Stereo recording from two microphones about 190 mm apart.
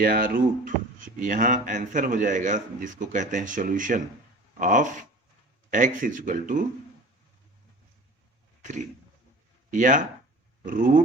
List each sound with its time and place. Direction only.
0.0 s speech: 50° right (ahead or behind)
9.7 s speech: 45° right (ahead or behind)